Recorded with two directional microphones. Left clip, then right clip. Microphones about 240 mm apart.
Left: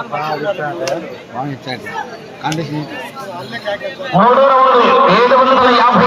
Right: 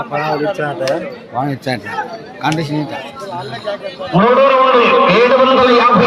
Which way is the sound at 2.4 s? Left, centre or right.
Right.